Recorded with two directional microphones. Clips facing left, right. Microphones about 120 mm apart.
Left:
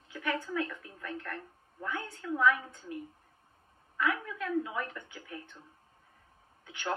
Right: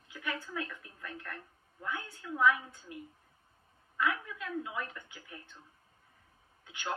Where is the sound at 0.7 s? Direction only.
10° right (ahead or behind).